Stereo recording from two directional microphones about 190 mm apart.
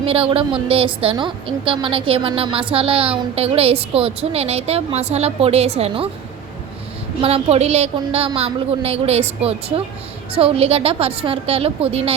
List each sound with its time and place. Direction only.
0.0 s a woman's voice: 30° right (ahead or behind)
7.2 s a woman's voice: 30° right (ahead or behind)